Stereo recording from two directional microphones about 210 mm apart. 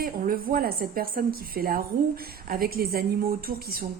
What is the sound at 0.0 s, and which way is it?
A woman's voice, 45° right (ahead or behind).